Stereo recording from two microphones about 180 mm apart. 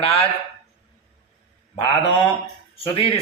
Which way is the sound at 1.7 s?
30° left (ahead or behind).